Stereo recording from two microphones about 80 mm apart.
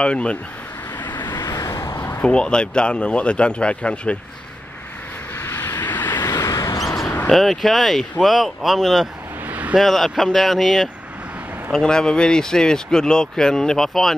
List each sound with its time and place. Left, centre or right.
0.0 s speech: centre
1.3 s vehicle: left
1.8 s a sound: left
2.2 s speech: centre
5.4 s vehicle: left
6.2 s a sound: left
6.8 s a sound: centre
7.2 s speech: centre
9.5 s vehicle: centre
9.8 s speech: centre